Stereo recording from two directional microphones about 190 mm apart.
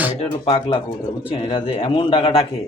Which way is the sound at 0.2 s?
30° left (ahead or behind).